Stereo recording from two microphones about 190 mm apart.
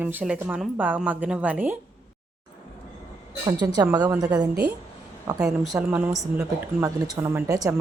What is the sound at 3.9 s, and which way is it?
Speech, 20° right (ahead or behind).